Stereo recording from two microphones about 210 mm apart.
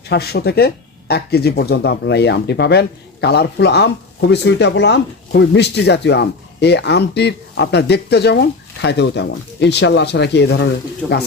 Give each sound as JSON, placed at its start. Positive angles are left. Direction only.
{"t": 0.1, "sound": "speech", "side_deg": 50}